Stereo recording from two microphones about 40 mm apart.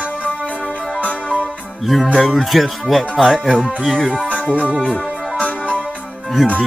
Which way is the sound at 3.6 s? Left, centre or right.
Centre.